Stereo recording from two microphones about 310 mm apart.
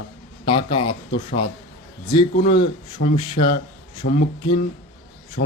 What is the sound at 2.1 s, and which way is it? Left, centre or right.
A man's voice, centre.